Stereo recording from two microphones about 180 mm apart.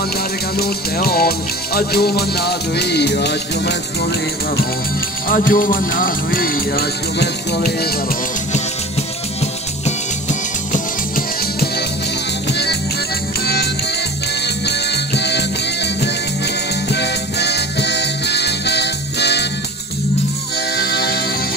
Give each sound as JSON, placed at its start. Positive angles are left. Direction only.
{"t": 0.6, "sound": "music", "side_deg": 60}
{"t": 5.3, "sound": "music", "side_deg": 50}
{"t": 10.7, "sound": "music", "side_deg": 50}
{"t": 14.4, "sound": "music", "side_deg": 65}
{"t": 20.7, "sound": "music", "side_deg": 65}